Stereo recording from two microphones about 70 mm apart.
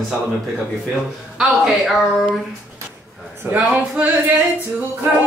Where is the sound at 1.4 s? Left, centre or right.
Centre.